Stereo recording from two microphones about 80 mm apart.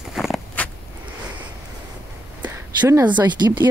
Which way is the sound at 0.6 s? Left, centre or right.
Centre.